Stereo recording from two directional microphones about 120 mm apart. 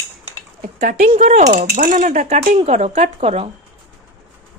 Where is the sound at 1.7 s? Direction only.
90° right; by 3.5 s 60° right (ahead or behind).